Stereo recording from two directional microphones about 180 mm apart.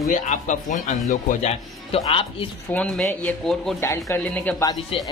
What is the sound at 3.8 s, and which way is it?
Speech, 15° left (ahead or behind).